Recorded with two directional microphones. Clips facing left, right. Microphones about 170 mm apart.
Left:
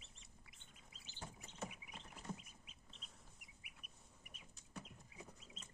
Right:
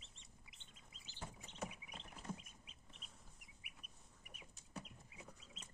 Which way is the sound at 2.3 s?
10° left (ahead or behind).